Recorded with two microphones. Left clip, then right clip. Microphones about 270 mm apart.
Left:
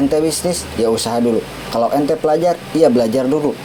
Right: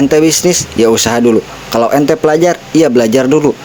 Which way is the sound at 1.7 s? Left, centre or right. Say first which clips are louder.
Right 5 dB; right.